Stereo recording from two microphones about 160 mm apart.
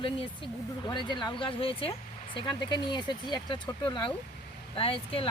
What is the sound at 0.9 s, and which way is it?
Speech, 30° left (ahead or behind).